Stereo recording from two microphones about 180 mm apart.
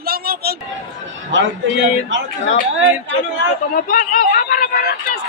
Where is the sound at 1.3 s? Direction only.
90° right.